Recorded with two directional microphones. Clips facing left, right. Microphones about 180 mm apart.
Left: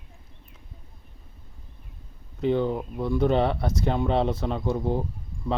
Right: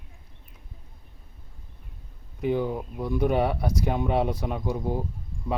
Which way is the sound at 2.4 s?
10° right (ahead or behind).